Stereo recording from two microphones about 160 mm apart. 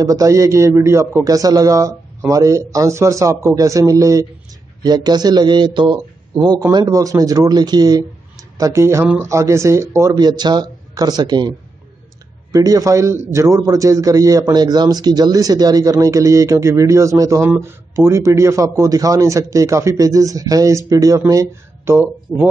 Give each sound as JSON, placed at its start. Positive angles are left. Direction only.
{"t": 0.0, "sound": "a man's voice", "side_deg": -20}
{"t": 12.5, "sound": "a man's voice", "side_deg": -20}
{"t": 22.3, "sound": "speech", "side_deg": 5}